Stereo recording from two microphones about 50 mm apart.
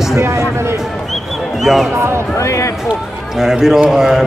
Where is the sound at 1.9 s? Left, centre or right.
Right.